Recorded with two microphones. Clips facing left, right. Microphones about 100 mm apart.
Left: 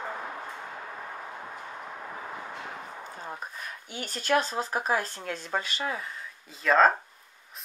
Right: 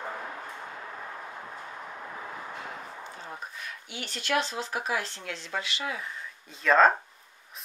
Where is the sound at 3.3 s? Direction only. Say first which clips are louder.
Left 1 dB; 40° left (ahead or behind).